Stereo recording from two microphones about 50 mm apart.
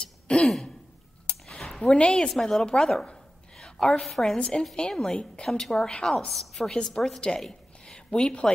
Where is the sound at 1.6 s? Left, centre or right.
Centre.